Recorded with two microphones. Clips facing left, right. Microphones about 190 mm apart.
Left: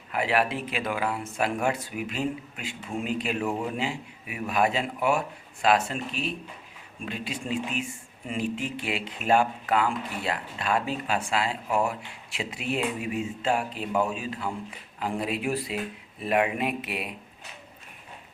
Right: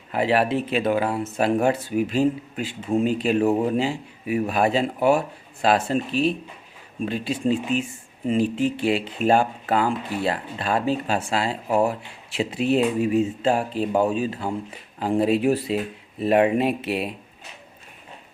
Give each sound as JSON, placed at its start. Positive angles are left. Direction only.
{"t": 0.1, "sound": "speech", "side_deg": -30}